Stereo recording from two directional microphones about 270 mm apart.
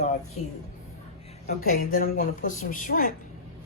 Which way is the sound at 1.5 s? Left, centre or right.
Left.